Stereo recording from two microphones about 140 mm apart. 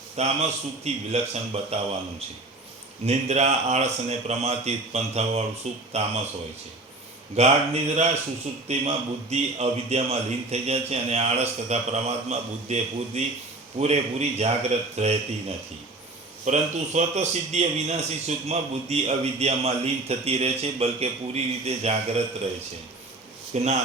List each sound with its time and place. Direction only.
0.2 s a man's voice: 50° right (ahead or behind)
3.1 s a man's voice: 50° right (ahead or behind)
7.3 s a man's voice: 50° right (ahead or behind)
23.5 s a man's voice: 55° right (ahead or behind)